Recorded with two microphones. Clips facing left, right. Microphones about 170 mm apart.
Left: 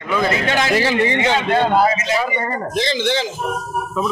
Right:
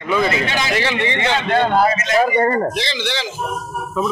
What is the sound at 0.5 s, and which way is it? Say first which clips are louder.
Speech: left 3 dB; 40° left (ahead or behind).